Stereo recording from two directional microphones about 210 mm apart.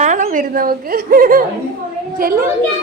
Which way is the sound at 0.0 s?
40° right (ahead or behind).